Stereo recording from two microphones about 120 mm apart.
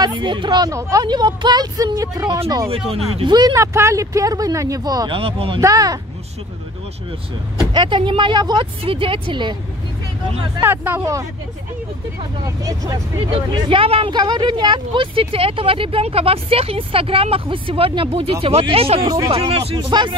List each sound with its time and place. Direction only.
0.0 s speech: 40° right (ahead or behind); by 2.7 s 25° right (ahead or behind)
3.3 s speech: 35° right (ahead or behind)
5.1 s speech: 50° right (ahead or behind)
5.6 s speech: 30° right (ahead or behind)
7.7 s speech: 40° right (ahead or behind)
10.6 s speech: 15° right (ahead or behind)
12.4 s speech: 30° right (ahead or behind)
13.5 s speech: 45° right (ahead or behind)
19.0 s speech: 35° right (ahead or behind)